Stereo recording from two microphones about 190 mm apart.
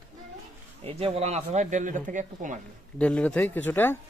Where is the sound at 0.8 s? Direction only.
30° right (ahead or behind).